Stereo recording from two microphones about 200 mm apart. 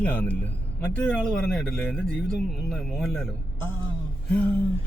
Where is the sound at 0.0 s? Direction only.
5° left (ahead or behind).